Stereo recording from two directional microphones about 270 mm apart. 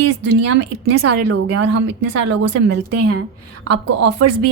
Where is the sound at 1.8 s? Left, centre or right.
Right.